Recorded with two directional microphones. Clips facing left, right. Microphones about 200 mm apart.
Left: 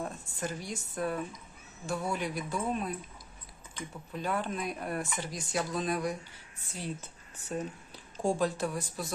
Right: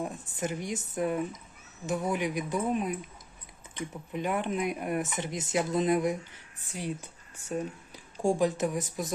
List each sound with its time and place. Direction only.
0.0 s speech: 15° right (ahead or behind)